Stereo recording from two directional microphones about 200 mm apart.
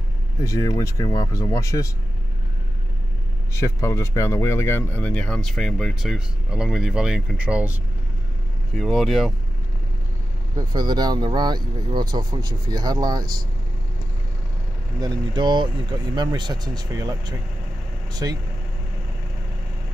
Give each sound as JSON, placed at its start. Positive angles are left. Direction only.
{"t": 0.4, "sound": "speech", "side_deg": 15}
{"t": 3.5, "sound": "speech", "side_deg": 15}
{"t": 10.7, "sound": "speech", "side_deg": -20}
{"t": 15.0, "sound": "speech", "side_deg": -20}